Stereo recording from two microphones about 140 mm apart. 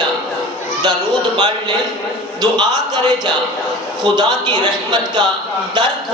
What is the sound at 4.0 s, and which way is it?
Speech, 30° right (ahead or behind).